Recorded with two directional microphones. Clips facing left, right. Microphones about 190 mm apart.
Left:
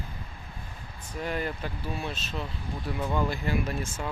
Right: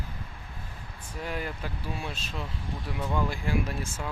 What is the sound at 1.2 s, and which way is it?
Speech, 5° right (ahead or behind).